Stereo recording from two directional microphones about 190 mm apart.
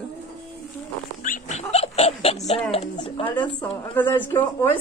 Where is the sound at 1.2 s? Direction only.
40° left (ahead or behind).